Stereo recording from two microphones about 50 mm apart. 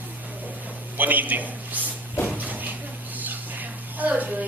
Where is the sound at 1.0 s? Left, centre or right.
Right.